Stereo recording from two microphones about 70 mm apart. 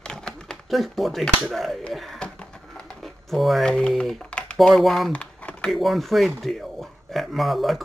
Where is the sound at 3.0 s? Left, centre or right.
Centre.